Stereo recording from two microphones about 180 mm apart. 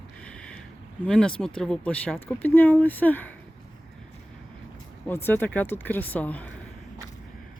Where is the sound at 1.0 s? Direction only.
5° left (ahead or behind).